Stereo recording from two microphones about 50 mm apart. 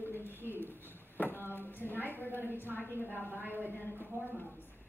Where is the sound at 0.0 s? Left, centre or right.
Left.